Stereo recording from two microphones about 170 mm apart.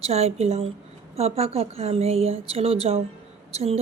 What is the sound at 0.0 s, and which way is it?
A woman's voice, 40° right (ahead or behind).